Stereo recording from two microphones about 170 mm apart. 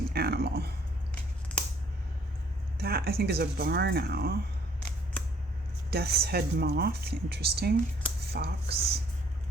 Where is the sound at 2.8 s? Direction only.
65° right (ahead or behind).